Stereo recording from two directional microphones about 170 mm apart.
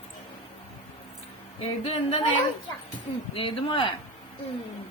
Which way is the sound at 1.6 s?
35° left (ahead or behind).